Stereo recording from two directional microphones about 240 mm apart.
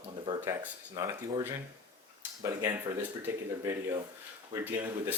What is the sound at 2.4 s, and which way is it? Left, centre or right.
Speech, centre.